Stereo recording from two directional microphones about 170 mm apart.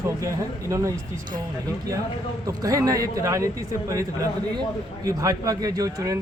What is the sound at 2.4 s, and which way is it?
A man's voice, 20° right (ahead or behind).